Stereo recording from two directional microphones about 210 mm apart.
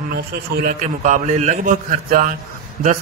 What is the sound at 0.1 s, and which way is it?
A man's voice, 45° right (ahead or behind).